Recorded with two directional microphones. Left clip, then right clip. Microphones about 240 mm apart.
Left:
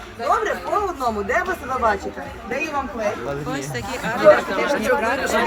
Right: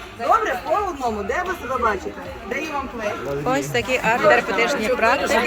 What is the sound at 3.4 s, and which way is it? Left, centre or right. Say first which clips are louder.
Speech: right 6 dB; centre.